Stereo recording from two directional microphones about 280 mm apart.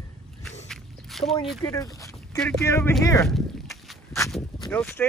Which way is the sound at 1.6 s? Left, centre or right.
Centre.